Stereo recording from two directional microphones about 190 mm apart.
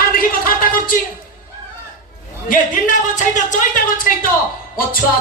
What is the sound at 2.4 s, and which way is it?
A woman's voice, 45° left (ahead or behind).